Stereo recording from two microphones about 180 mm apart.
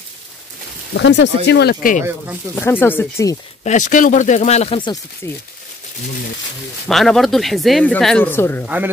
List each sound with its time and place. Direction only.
0.9 s speech: 85° left; by 2.0 s 50° left (ahead or behind)
2.5 s speech: 10° left (ahead or behind)
3.6 s speech: 45° left (ahead or behind); by 5.0 s 25° left (ahead or behind)
5.2 s speech: 15° left (ahead or behind)
6.9 s speech: centre (ahead or behind)